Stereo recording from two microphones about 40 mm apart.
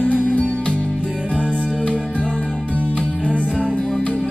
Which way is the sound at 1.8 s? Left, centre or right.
Left.